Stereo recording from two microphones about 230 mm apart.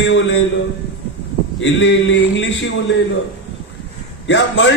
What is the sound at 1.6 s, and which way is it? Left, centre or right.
A man's voice, left.